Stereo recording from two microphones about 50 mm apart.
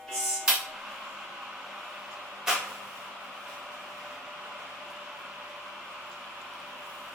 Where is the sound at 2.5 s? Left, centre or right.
Centre.